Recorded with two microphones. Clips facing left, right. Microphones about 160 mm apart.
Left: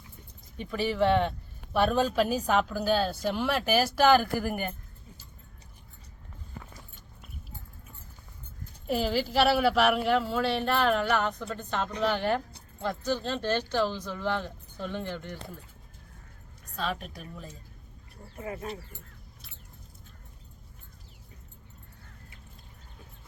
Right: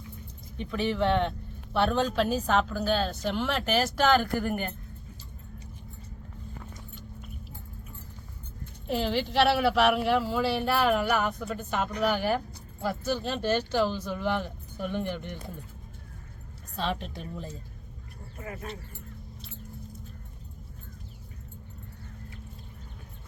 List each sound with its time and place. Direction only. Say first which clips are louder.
0.5 s a woman's voice: right 1 dB; 5° left (ahead or behind)
8.9 s a woman's voice: even; 5° left (ahead or behind); by 15.4 s 15° right (ahead or behind)
16.7 s a woman's voice: right 2 dB; 30° right (ahead or behind)
18.3 s speech: left 3 dB; 25° left (ahead or behind)